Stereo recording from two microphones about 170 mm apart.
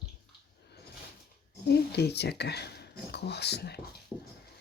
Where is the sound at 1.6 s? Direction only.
75° left (ahead or behind).